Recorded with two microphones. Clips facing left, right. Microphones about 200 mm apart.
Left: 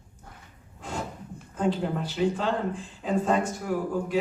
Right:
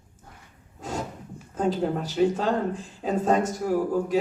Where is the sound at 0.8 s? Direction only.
40° right (ahead or behind).